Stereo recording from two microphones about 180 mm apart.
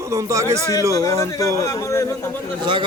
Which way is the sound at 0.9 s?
15° left (ahead or behind).